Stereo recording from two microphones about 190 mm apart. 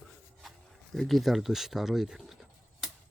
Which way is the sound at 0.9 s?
Centre (ahead or behind).